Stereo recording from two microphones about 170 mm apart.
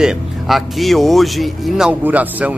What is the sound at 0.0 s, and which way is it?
Speech, centre (ahead or behind).